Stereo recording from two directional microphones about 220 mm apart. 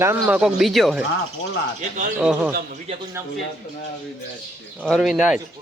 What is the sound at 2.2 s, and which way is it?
Speech, 5° right (ahead or behind).